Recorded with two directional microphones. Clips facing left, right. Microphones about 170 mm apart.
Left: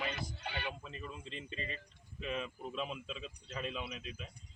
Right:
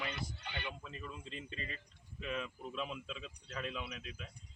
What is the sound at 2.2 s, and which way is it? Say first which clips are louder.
Speech: left 1 dB; 20° left (ahead or behind).